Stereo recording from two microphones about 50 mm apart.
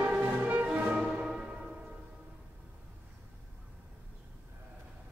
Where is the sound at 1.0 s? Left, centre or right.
Centre.